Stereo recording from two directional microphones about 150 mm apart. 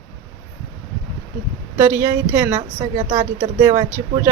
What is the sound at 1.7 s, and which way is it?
Speech, 15° right (ahead or behind).